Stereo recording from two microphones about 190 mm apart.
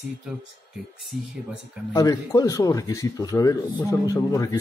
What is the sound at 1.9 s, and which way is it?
Speech, 15° left (ahead or behind).